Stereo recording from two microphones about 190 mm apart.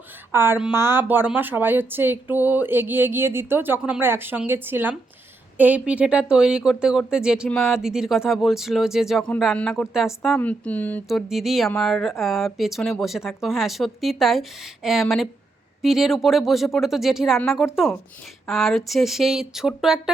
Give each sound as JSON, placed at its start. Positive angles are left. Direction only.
{"t": 0.3, "sound": "a woman's voice", "side_deg": -10}